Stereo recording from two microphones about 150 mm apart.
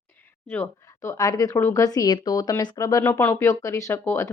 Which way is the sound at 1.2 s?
25° left (ahead or behind).